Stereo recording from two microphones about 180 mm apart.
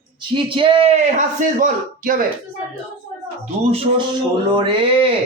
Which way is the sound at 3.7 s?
30° right (ahead or behind).